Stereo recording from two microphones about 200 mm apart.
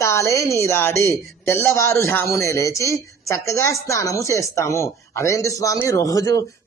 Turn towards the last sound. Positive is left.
turn(degrees=15)  # may be behind; listen again after turning